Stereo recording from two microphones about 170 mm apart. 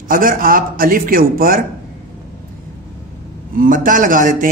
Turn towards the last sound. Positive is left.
turn(degrees=-50)  # may be behind; listen again after turning